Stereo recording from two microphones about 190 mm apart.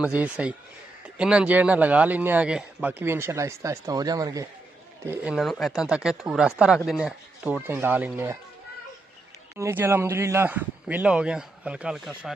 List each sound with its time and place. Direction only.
0.0 s speech: 5° right (ahead or behind)
9.6 s speech: 15° right (ahead or behind)